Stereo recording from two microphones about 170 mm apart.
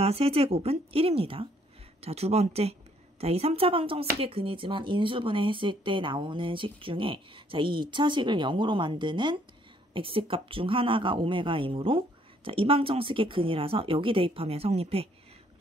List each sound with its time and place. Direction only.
0.0 s a woman's voice: 35° right (ahead or behind)